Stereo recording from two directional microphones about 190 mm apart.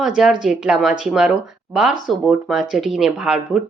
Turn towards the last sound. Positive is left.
turn(degrees=-5)  # may be behind; listen again after turning